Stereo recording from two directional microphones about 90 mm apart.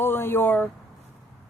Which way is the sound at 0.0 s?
25° left (ahead or behind).